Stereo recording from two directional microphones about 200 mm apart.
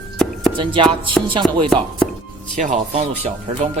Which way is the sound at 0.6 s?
25° right (ahead or behind).